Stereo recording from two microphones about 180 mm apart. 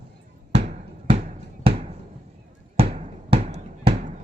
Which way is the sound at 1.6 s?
30° right (ahead or behind).